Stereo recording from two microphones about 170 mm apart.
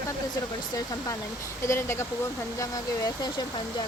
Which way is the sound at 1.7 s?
15° left (ahead or behind).